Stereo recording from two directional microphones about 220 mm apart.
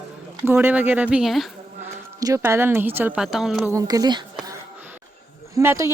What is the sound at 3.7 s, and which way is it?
Speech, 15° right (ahead or behind).